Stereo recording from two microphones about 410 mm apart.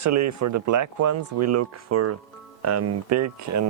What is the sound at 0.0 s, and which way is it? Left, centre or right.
Speech, right.